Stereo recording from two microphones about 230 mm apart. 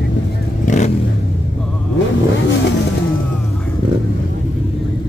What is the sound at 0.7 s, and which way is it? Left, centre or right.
Vehicle, left.